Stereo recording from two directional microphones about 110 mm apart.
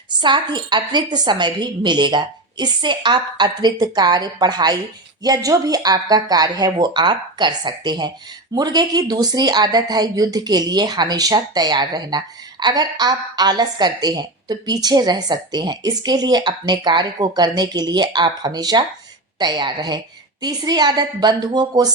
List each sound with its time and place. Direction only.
0.2 s speech: 45° right (ahead or behind)